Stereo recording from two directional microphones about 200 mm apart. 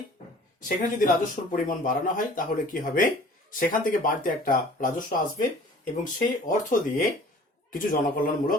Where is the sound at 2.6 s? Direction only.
45° left (ahead or behind).